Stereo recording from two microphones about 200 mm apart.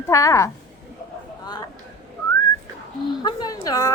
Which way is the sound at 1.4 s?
20° left (ahead or behind).